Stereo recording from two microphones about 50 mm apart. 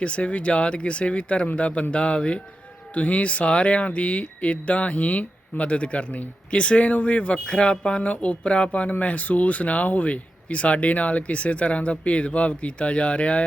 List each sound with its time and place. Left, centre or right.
0.0 s speech: left